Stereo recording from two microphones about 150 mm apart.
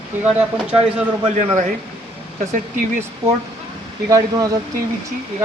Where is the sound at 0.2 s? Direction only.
10° right (ahead or behind).